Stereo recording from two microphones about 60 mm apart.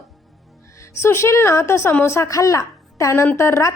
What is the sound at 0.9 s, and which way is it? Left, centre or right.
A woman's voice, left.